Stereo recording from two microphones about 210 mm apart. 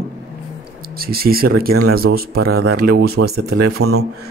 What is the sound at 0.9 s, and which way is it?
Speech, 45° right (ahead or behind).